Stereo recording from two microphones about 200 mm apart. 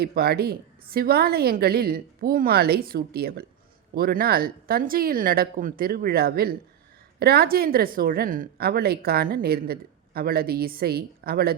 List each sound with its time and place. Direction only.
0.0 s a woman's voice: 50° right (ahead or behind)